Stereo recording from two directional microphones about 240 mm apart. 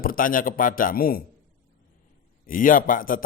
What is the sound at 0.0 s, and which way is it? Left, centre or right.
A man's voice, left.